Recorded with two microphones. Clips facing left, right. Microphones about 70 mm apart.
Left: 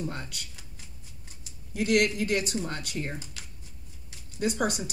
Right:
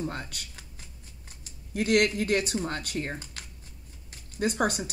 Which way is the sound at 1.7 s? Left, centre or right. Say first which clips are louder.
Right 1 dB; right.